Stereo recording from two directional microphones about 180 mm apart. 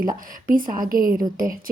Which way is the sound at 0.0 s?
50° right (ahead or behind).